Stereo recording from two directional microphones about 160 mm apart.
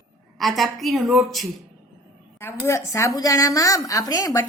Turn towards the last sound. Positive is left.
turn(degrees=20)  # may be behind; listen again after turning